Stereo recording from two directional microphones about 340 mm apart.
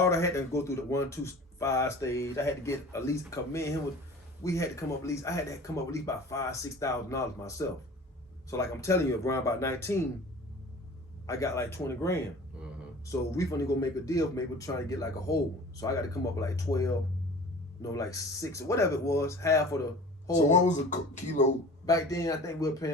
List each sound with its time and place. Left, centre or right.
0.0 s speech: centre
11.3 s speech: centre
20.7 s speech: left
21.8 s speech: centre